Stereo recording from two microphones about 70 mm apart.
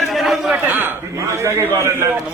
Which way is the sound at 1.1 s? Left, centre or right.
Right.